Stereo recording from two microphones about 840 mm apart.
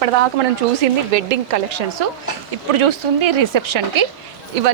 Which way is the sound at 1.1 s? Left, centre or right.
Right.